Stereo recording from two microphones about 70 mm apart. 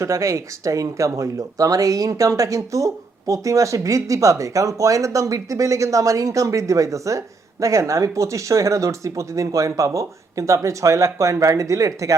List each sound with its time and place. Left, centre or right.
0.0 s speech: right